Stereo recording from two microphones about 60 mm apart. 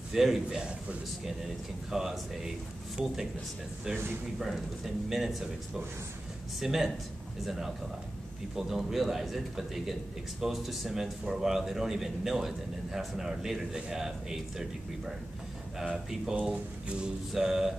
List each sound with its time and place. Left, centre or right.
0.1 s speech: centre
0.6 s a man's voice: centre
4.4 s speech: centre
6.6 s a man's voice: centre
16.8 s a sound: centre
17.3 s a man's voice: centre